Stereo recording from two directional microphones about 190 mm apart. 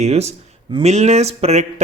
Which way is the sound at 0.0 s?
35° right (ahead or behind).